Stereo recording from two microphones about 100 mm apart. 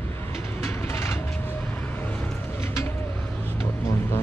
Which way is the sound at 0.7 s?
25° left (ahead or behind).